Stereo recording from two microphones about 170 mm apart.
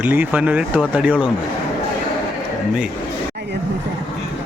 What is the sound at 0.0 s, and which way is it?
Speech, 10° right (ahead or behind).